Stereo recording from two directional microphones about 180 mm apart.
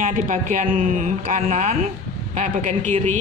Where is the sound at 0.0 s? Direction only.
45° right (ahead or behind).